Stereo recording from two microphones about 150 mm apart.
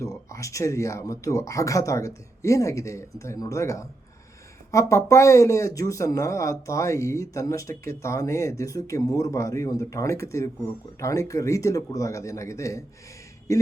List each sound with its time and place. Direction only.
0.0 s speech: 20° left (ahead or behind)